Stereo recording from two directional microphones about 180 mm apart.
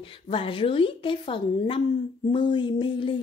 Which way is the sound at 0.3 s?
30° left (ahead or behind).